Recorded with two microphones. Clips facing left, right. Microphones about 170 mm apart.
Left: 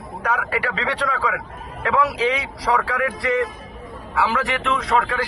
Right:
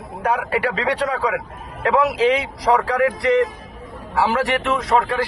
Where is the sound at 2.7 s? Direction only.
35° right (ahead or behind).